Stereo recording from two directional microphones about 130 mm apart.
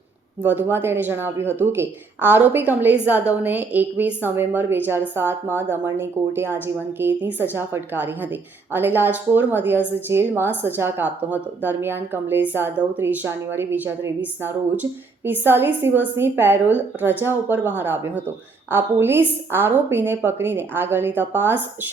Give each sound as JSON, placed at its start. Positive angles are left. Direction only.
{"t": 0.4, "sound": "a woman's voice", "side_deg": -15}